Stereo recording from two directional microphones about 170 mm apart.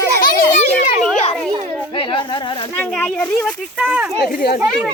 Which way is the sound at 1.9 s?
30° left (ahead or behind).